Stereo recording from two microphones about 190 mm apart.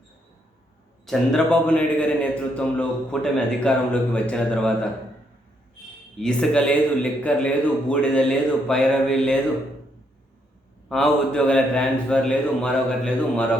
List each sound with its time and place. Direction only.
1.0 s a man's voice: 5° left (ahead or behind)
6.1 s a man's voice: 5° left (ahead or behind)
10.8 s a man's voice: centre (ahead or behind)